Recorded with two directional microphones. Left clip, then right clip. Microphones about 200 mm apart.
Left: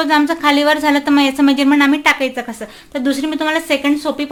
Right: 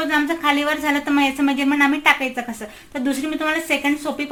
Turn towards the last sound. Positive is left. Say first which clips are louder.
# left 5 dB
turn(degrees=55)  # may be behind; listen again after turning